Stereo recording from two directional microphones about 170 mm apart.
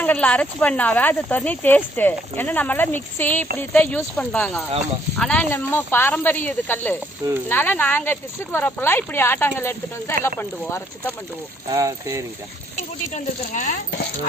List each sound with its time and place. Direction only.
0.0 s speech: 10° left (ahead or behind)
11.7 s speech: 20° right (ahead or behind)
13.1 s speech: 45° left (ahead or behind)